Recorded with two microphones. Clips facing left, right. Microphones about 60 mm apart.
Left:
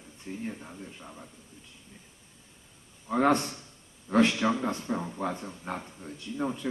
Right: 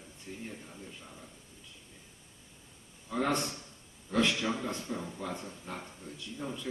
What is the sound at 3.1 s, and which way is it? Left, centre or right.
Speech, left.